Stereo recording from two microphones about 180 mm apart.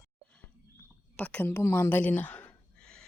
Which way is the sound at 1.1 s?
10° left (ahead or behind).